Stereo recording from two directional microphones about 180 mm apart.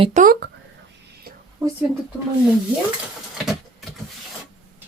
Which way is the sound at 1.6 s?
20° right (ahead or behind).